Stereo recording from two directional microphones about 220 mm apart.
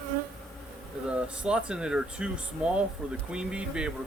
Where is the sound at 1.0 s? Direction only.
5° right (ahead or behind).